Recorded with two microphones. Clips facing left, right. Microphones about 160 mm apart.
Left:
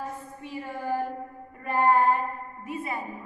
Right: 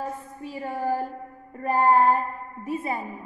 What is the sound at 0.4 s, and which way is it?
A woman's voice, 40° right (ahead or behind).